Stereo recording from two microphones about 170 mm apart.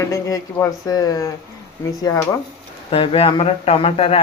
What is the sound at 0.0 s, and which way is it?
Speech, 20° left (ahead or behind).